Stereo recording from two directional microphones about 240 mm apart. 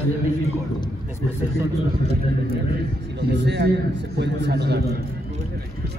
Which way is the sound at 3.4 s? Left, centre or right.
Right.